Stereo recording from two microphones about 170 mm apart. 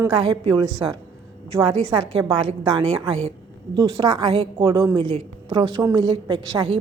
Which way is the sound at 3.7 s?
25° right (ahead or behind).